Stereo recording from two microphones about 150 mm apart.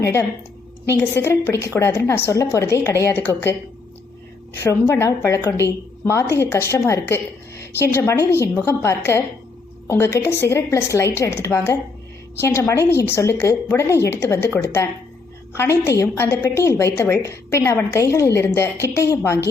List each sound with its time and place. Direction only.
0.0 s a woman's voice: 20° left (ahead or behind)
4.6 s a woman's voice: 15° left (ahead or behind)